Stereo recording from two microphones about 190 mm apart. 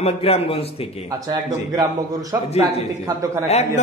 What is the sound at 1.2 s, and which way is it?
A man's voice, 20° right (ahead or behind).